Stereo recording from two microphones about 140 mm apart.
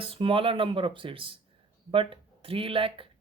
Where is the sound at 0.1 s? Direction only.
40° right (ahead or behind).